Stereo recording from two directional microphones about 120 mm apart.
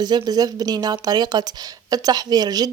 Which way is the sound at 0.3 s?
35° right (ahead or behind).